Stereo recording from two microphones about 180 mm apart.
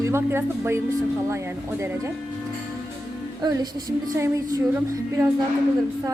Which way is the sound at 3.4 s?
20° right (ahead or behind).